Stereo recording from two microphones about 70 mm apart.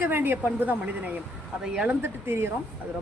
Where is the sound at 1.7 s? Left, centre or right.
Centre.